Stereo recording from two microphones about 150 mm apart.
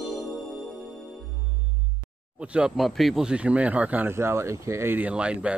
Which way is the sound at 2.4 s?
5° right (ahead or behind).